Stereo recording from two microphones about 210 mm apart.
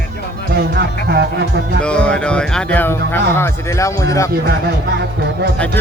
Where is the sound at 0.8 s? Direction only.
50° right (ahead or behind).